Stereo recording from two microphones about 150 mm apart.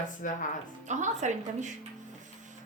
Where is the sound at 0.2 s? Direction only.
60° left (ahead or behind).